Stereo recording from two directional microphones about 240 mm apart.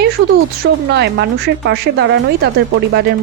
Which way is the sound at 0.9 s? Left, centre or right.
Right.